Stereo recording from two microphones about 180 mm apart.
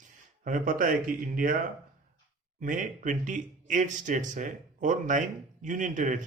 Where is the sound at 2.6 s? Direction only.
45° right (ahead or behind).